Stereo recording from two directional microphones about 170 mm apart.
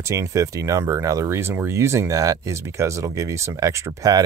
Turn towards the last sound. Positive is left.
turn(degrees=-20)  # may be behind; listen again after turning